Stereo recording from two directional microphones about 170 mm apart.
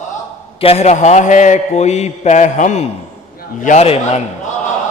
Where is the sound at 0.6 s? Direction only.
35° left (ahead or behind).